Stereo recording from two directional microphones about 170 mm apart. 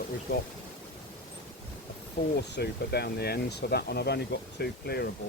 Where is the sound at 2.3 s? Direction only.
70° left (ahead or behind).